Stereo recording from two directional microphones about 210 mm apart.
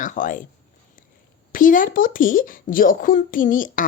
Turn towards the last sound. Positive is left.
turn(degrees=40)  # may be behind; listen again after turning